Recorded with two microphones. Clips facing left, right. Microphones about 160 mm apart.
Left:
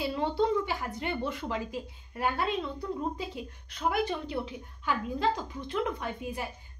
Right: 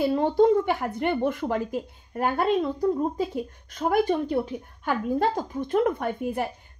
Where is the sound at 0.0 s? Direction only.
45° right (ahead or behind).